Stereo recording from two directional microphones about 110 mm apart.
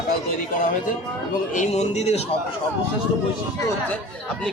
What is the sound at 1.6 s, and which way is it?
Speech, 90° left.